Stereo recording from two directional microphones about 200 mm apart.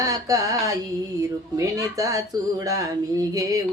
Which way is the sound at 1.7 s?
15° right (ahead or behind).